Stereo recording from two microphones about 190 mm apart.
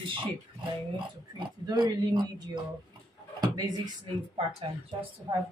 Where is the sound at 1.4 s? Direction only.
25° right (ahead or behind).